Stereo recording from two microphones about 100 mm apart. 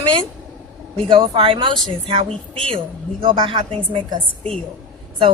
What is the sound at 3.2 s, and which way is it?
A woman's voice, 60° right (ahead or behind).